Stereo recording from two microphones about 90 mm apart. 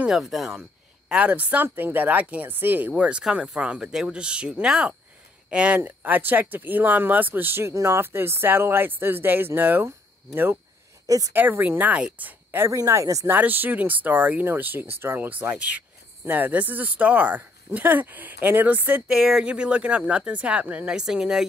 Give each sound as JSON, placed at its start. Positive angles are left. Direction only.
{"t": 0.0, "sound": "speech", "side_deg": -5}
{"t": 11.1, "sound": "speech", "side_deg": -40}
{"t": 11.3, "sound": "speech", "side_deg": -20}
{"t": 12.7, "sound": "speech", "side_deg": -35}
{"t": 13.3, "sound": "speech", "side_deg": -20}
{"t": 19.0, "sound": "speech", "side_deg": -5}